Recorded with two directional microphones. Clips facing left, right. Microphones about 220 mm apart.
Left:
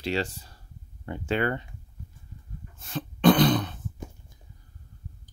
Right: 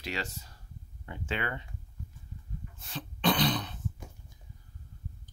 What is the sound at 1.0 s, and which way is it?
Speech, 45° left (ahead or behind).